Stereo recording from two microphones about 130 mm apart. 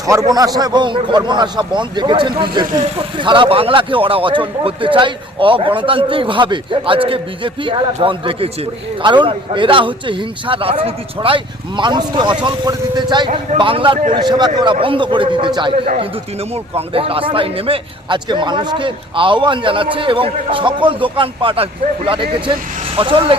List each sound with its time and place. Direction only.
0.0 s a man's voice: 25° right (ahead or behind)
16.0 s a man's voice: 50° right (ahead or behind)